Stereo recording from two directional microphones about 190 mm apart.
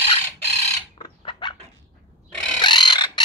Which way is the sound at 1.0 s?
25° left (ahead or behind).